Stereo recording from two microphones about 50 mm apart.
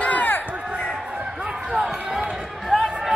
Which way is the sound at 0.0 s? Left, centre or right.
Left.